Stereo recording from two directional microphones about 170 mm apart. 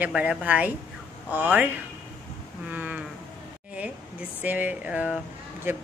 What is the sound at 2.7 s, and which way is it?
Speech, 10° right (ahead or behind).